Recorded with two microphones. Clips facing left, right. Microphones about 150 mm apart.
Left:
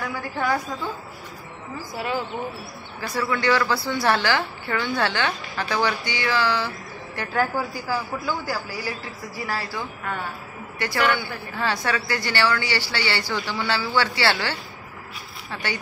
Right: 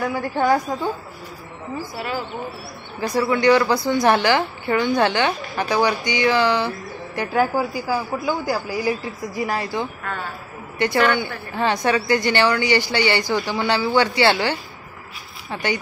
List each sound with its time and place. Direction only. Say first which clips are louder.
0.0 s a woman's voice: right 6 dB; 30° right (ahead or behind)
3.0 s a woman's voice: right 6 dB; 20° right (ahead or behind)